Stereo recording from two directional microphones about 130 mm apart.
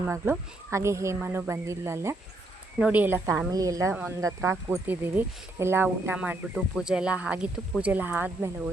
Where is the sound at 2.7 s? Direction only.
10° right (ahead or behind).